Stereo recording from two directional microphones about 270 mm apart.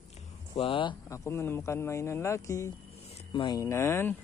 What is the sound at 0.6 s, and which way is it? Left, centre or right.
Speech, centre.